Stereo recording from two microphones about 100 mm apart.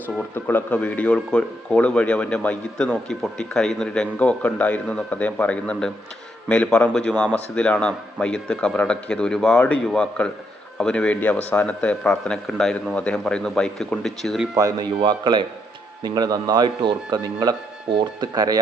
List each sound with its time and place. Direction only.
0.3 s speech: 15° left (ahead or behind)
14.5 s speech: 40° right (ahead or behind)